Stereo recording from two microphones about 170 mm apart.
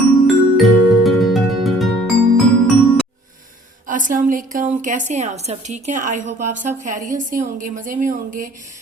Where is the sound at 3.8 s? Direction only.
50° right (ahead or behind).